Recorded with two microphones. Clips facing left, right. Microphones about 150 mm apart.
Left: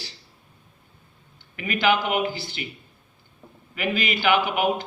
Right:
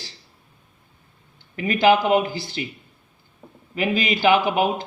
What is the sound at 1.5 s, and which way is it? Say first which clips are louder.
A man's voice: right 5 dB; 35° right (ahead or behind).